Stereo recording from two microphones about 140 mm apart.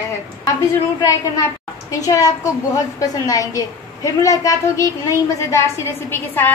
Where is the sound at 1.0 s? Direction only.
25° left (ahead or behind).